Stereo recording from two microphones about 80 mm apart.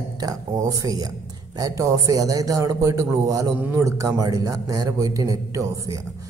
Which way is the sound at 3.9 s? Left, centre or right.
Right.